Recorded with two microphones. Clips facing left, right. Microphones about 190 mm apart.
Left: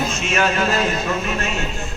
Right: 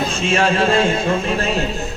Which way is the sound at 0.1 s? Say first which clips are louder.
Right 3 dB; 30° right (ahead or behind).